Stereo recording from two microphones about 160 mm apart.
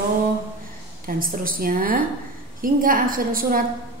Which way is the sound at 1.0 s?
60° right (ahead or behind).